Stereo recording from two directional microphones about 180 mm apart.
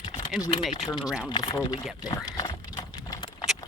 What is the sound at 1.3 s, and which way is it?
Speech, 20° left (ahead or behind).